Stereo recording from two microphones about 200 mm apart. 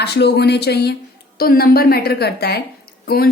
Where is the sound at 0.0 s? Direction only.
55° left (ahead or behind).